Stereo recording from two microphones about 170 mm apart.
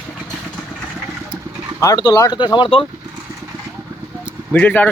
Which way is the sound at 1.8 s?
20° left (ahead or behind).